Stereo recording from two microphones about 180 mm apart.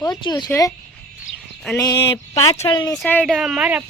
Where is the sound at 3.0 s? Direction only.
5° left (ahead or behind).